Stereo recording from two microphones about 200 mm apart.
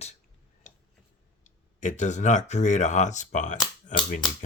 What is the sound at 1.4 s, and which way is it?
Speech, 40° left (ahead or behind).